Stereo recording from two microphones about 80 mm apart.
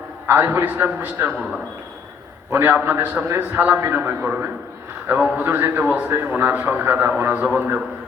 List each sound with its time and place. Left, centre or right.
0.3 s a man's voice: right
2.5 s a man's voice: right
3.2 s a man's voice: right